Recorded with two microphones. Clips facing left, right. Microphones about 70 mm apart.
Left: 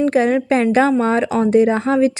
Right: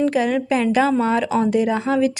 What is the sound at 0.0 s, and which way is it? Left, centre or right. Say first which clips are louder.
A woman's voice: left 3 dB; left.